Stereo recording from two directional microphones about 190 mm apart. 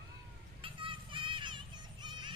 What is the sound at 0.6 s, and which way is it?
Music, 25° right (ahead or behind).